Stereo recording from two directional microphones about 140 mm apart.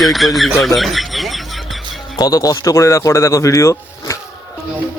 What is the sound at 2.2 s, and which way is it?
Speech, 25° left (ahead or behind).